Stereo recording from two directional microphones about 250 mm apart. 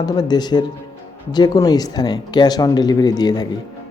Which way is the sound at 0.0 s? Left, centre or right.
Centre.